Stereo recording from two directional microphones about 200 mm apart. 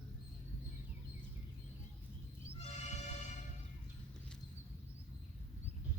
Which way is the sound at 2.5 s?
35° left (ahead or behind).